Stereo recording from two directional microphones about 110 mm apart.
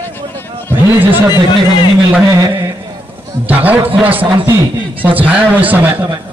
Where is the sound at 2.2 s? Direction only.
30° right (ahead or behind).